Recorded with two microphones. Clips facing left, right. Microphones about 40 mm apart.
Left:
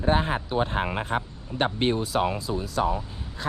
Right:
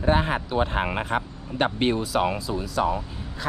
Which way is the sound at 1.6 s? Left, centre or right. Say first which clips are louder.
Right 1 dB; right.